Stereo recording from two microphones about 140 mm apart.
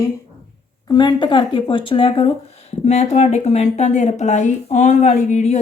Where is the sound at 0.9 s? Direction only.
30° left (ahead or behind).